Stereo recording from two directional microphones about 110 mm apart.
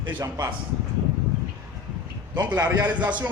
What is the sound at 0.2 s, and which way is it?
Speech, 30° right (ahead or behind).